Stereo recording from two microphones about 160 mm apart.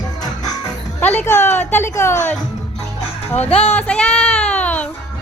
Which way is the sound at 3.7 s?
5° left (ahead or behind).